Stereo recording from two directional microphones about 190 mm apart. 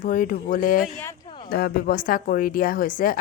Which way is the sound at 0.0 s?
45° left (ahead or behind).